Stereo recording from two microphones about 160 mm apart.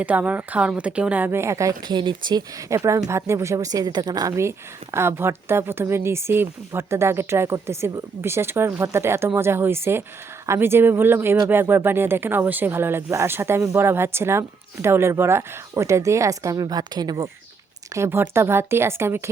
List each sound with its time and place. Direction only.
0.0 s a woman's voice: 10° right (ahead or behind)